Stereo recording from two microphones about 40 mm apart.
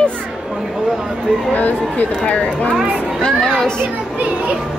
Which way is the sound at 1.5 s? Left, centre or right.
Left.